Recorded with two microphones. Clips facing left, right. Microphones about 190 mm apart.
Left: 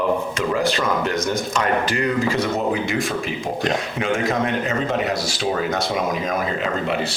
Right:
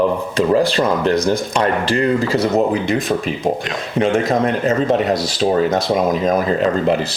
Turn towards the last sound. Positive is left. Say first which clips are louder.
# right 7 dB
turn(degrees=-35)  # may be behind; listen again after turning